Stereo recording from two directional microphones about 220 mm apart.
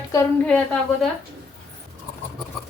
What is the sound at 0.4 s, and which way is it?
Speech, 5° left (ahead or behind).